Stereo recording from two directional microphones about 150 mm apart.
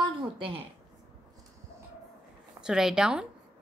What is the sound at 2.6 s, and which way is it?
Speech, 5° right (ahead or behind).